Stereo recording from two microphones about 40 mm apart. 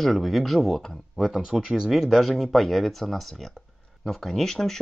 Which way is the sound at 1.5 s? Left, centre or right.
Centre.